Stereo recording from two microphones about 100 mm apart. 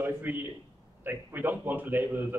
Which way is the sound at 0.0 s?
20° right (ahead or behind).